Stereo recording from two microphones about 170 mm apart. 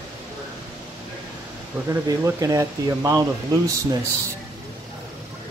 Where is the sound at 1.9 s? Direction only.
15° right (ahead or behind).